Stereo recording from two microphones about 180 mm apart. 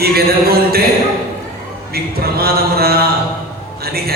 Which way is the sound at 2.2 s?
60° right (ahead or behind).